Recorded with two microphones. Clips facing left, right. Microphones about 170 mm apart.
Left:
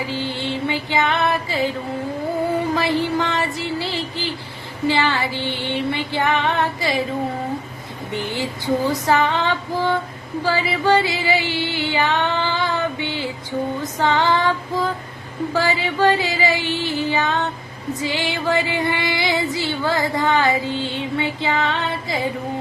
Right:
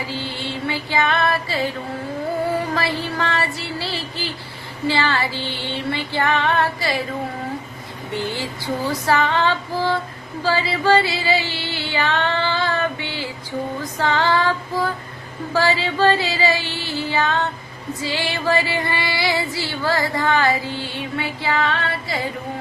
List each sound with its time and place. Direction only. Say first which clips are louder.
0.1 s music: left 3 dB; 20° left (ahead or behind)
2.7 s a sound: left 4 dB; 15° left (ahead or behind)
4.9 s female singing: left 1 dB; 15° left (ahead or behind)
8.1 s female singing: left 1 dB; 15° left (ahead or behind)
10.4 s music: even; 15° left (ahead or behind)
14.0 s female singing: left 1 dB; 15° left (ahead or behind)
15.5 s female singing: right 2 dB; 15° left (ahead or behind)